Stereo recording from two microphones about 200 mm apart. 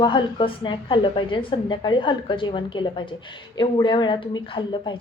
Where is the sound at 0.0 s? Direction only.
25° left (ahead or behind).